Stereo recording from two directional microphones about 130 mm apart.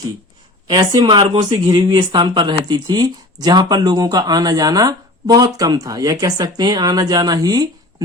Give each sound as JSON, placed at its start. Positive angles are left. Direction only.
{"t": 0.7, "sound": "a woman's voice", "side_deg": -30}
{"t": 1.0, "sound": "speech", "side_deg": -40}